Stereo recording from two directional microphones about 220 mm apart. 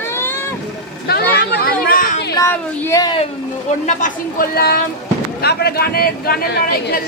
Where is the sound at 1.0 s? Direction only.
45° left (ahead or behind).